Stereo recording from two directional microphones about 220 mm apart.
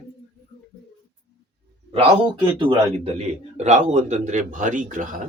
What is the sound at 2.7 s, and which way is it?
Speech, 30° right (ahead or behind).